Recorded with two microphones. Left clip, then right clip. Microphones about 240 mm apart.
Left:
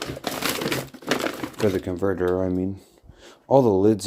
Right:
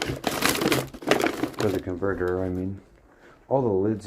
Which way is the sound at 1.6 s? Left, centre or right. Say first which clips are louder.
Left 5 dB; left.